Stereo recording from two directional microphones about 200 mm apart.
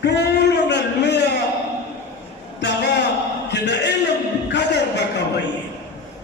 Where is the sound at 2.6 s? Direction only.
60° left (ahead or behind).